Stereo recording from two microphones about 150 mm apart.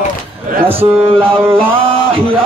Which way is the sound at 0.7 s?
40° right (ahead or behind).